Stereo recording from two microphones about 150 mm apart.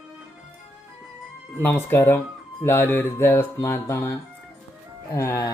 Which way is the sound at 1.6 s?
15° left (ahead or behind).